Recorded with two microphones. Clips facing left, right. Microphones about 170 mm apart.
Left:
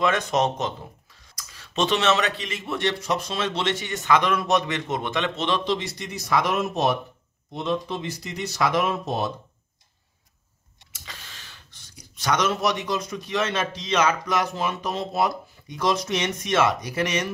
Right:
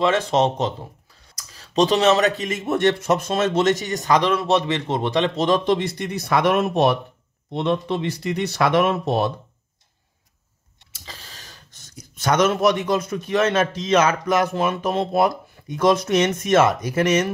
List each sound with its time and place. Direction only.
0.0 s speech: 30° right (ahead or behind); by 9.3 s 65° right (ahead or behind)
11.1 s speech: 40° right (ahead or behind)